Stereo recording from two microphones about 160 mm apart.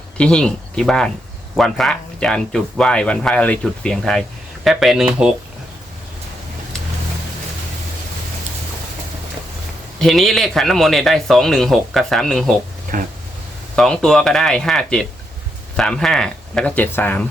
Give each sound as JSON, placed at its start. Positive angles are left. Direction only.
{"t": 0.2, "sound": "speech", "side_deg": 5}
{"t": 10.0, "sound": "speech", "side_deg": 0}
{"t": 12.9, "sound": "speech", "side_deg": -55}
{"t": 13.7, "sound": "speech", "side_deg": 5}